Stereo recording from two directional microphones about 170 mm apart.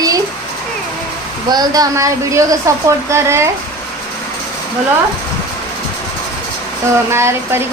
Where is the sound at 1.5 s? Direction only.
20° right (ahead or behind).